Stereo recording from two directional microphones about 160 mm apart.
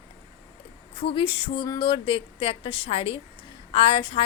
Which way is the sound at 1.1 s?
30° left (ahead or behind).